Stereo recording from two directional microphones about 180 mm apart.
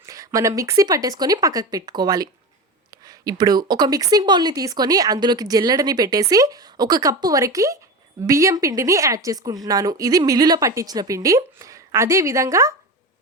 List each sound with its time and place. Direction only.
0.0 s a woman's voice: 15° right (ahead or behind)